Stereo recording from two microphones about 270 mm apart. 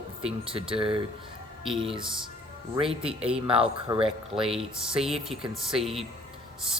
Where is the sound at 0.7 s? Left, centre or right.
Centre.